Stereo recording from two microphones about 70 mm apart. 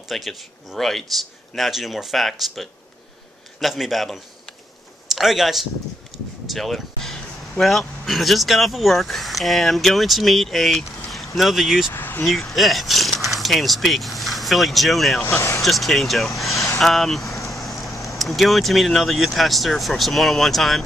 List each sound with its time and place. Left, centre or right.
0.1 s speech: centre
6.1 s a sound: centre
6.5 s speech: centre
11.9 s speech: left
12.3 s speech: centre
15.2 s speech: left
15.6 s speech: centre